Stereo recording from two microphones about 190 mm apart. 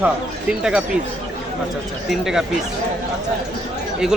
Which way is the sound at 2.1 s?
Centre (ahead or behind).